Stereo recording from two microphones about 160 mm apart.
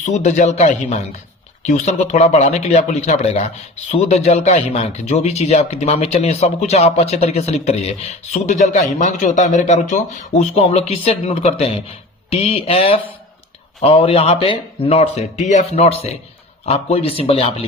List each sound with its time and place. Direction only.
0.0 s speech: 45° left (ahead or behind)